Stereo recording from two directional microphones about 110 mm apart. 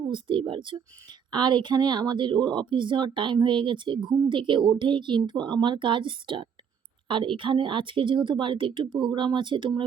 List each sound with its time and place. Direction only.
0.1 s speech: 50° right (ahead or behind)